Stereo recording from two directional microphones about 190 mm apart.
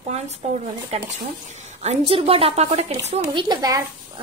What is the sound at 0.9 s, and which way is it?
A woman's voice, 35° right (ahead or behind).